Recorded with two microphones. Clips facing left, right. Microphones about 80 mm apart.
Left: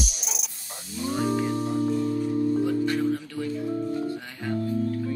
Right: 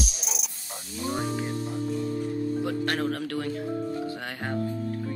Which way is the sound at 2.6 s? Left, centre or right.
Right.